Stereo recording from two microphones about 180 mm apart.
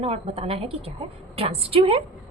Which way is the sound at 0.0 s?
35° right (ahead or behind).